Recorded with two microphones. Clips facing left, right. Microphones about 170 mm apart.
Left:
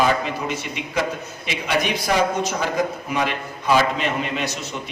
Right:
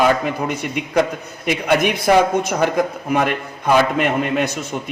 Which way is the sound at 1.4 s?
55° right (ahead or behind).